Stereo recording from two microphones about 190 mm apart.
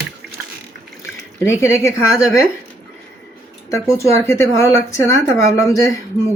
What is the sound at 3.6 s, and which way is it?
Speech, 15° left (ahead or behind).